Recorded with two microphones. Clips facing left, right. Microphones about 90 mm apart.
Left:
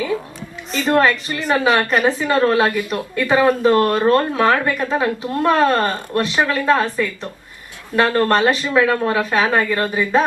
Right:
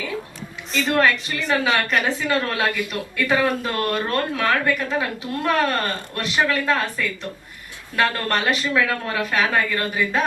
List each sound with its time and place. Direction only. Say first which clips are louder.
0.9 s a woman's voice: left 4 dB; 35° left (ahead or behind)